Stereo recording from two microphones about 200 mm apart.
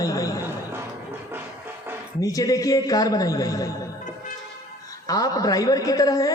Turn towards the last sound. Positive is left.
turn(degrees=15)  # may be behind; listen again after turning